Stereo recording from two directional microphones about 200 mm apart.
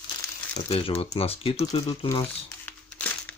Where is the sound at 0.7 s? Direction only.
30° left (ahead or behind).